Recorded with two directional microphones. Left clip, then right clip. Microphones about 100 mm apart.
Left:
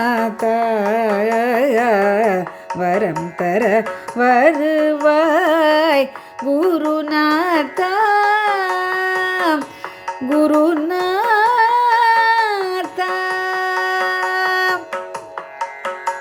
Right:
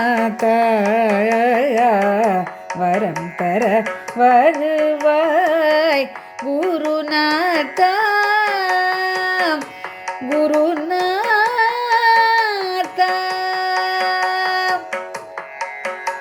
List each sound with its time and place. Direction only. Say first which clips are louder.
0.0 s a sound: even; 10° left (ahead or behind)
0.4 s carnatic music: right 2 dB; 5° right (ahead or behind); by 1.6 s 10° left (ahead or behind)
1.7 s carnatic music: even; 35° left (ahead or behind)
6.6 s music: left 2 dB; 30° left (ahead or behind)
6.8 s carnatic music: left 1 dB; 5° left (ahead or behind)
7.4 s carnatic music: right 2 dB; 15° left (ahead or behind)
10.3 s music: left 1 dB; 40° left (ahead or behind)
10.8 s a sound: left 1 dB; 15° left (ahead or behind)
13.0 s music: right 2 dB; 15° left (ahead or behind)
14.3 s a sound: left 1 dB; 20° left (ahead or behind)